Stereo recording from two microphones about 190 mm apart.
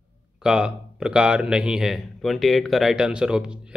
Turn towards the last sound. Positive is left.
turn(degrees=-5)  # may be behind; listen again after turning